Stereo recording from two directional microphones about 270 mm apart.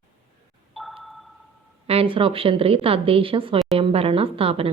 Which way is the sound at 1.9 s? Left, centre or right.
Right.